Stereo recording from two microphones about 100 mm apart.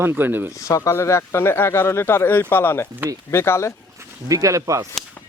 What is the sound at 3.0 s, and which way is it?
Speech, 20° right (ahead or behind).